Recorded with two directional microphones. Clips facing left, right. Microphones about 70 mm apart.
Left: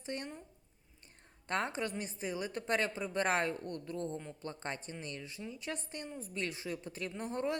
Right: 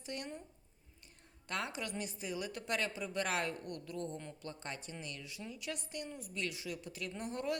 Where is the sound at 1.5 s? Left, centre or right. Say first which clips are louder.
Left 5 dB; left.